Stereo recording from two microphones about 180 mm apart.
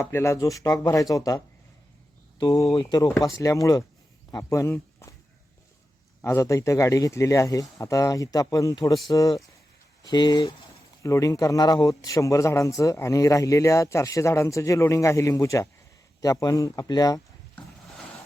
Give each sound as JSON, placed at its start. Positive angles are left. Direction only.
{"t": 0.0, "sound": "speech", "side_deg": 15}
{"t": 2.4, "sound": "speech", "side_deg": 20}
{"t": 6.2, "sound": "speech", "side_deg": 15}
{"t": 17.5, "sound": "a sound", "side_deg": 0}